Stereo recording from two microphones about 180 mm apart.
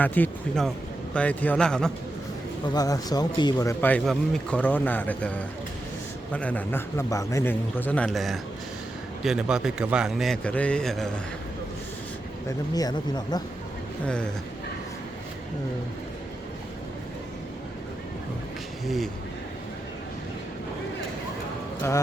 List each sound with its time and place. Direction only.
0.0 s speech: 10° left (ahead or behind)
2.6 s a man's voice: 20° left (ahead or behind); by 11.1 s centre (ahead or behind)
12.5 s speech: 20° left (ahead or behind)
14.0 s a man's voice: 5° left (ahead or behind)
18.9 s a man's voice: centre (ahead or behind)